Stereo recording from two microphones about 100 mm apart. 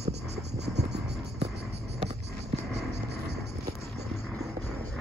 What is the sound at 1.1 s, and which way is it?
Hum, 5° right (ahead or behind).